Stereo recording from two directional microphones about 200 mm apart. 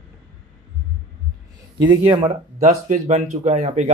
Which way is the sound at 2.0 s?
30° right (ahead or behind).